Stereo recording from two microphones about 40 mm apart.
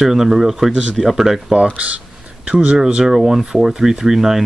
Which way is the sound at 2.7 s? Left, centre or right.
Centre.